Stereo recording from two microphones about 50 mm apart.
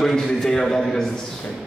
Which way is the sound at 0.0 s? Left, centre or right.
Centre.